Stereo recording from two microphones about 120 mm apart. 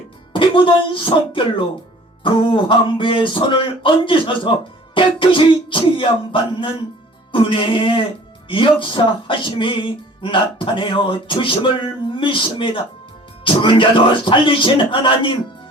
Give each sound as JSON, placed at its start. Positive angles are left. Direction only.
{"t": 0.3, "sound": "music", "side_deg": 45}